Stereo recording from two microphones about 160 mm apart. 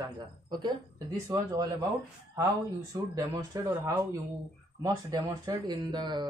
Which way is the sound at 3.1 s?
20° right (ahead or behind).